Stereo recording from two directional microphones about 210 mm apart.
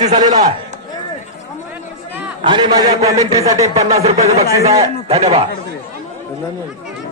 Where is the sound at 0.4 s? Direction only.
35° right (ahead or behind).